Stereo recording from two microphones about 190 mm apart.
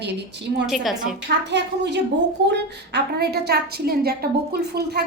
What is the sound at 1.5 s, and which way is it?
A woman's voice, 65° right (ahead or behind).